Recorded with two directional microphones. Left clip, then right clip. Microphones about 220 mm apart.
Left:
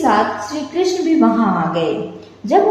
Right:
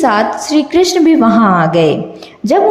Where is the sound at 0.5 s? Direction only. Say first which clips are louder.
Right 12 dB; 45° right (ahead or behind).